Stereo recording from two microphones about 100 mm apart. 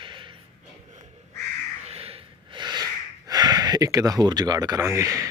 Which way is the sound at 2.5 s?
45° right (ahead or behind).